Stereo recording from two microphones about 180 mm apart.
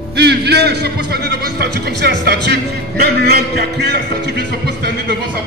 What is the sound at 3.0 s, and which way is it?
Speech, 65° right (ahead or behind).